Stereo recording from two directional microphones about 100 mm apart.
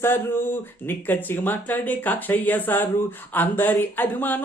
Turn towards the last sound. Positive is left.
turn(degrees=20)  # may be behind; listen again after turning